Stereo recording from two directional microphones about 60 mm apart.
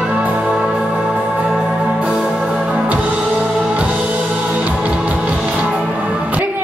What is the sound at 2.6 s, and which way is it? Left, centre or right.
Music, right.